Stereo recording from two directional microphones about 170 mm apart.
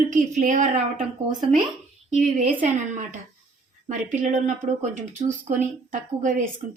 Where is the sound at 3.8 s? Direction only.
45° right (ahead or behind).